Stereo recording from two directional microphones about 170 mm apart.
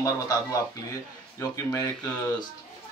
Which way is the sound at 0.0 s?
20° left (ahead or behind).